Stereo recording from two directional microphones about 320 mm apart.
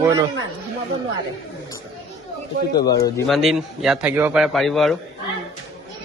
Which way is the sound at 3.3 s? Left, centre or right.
Centre.